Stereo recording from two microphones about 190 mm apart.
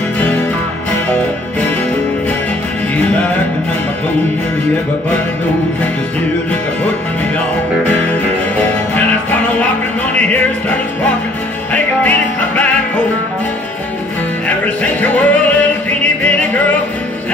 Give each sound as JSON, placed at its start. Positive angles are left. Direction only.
{"t": 3.0, "sound": "music", "side_deg": 5}
{"t": 7.8, "sound": "music", "side_deg": 5}
{"t": 11.7, "sound": "music", "side_deg": 10}
{"t": 14.8, "sound": "music", "side_deg": 10}